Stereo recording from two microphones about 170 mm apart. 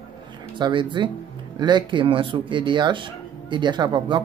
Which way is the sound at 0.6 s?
25° right (ahead or behind).